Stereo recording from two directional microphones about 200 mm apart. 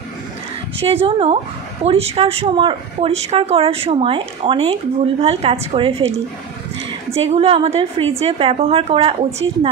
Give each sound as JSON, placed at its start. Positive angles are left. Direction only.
{"t": 1.0, "sound": "a woman's voice", "side_deg": -30}
{"t": 7.2, "sound": "a woman's voice", "side_deg": -30}